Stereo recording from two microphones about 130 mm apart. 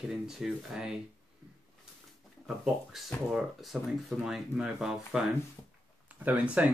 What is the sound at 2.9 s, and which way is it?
Speech, centre (ahead or behind).